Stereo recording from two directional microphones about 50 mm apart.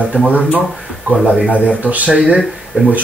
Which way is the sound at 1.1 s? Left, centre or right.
Right.